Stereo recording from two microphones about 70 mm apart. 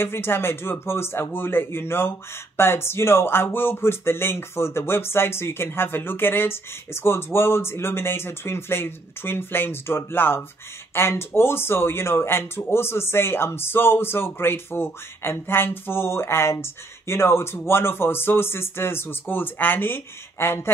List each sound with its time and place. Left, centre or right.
0.0 s speech: left